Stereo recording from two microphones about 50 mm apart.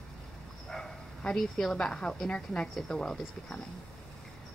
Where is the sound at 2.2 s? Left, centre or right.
Left.